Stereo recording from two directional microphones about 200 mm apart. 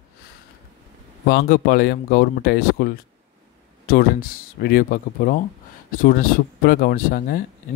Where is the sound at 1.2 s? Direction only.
50° left (ahead or behind).